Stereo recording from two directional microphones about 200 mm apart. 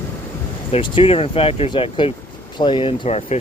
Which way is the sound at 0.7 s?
30° left (ahead or behind).